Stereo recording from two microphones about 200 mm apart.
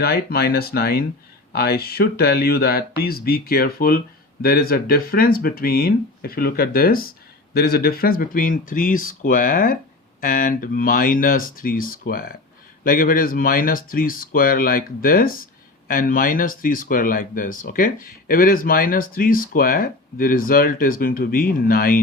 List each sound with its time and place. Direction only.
0.0 s speech: 50° left (ahead or behind)